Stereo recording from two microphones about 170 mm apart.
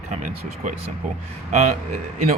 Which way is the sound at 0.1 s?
50° right (ahead or behind).